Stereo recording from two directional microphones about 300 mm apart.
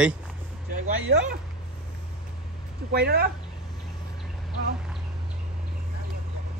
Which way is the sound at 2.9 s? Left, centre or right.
Right.